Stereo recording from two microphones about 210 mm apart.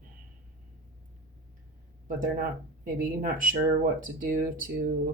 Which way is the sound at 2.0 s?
40° right (ahead or behind).